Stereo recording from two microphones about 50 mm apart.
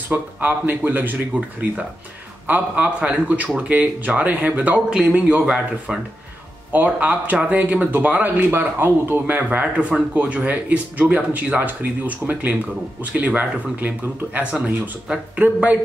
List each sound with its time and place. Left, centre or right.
0.1 s speech: right
5.4 s speech: centre
6.7 s speech: right
9.2 s speech: right